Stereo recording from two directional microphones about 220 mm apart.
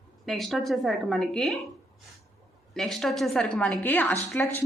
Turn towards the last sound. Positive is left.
turn(degrees=10)  # may be behind; listen again after turning